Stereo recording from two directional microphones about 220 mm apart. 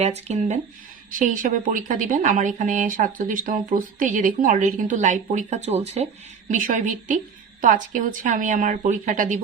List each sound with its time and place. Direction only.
0.0 s speech: 30° right (ahead or behind)